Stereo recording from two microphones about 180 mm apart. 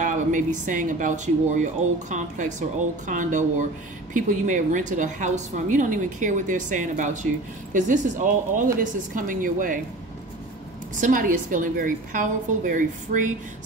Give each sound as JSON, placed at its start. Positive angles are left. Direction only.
{"t": 0.0, "sound": "a woman's voice", "side_deg": -45}
{"t": 11.0, "sound": "a woman's voice", "side_deg": -50}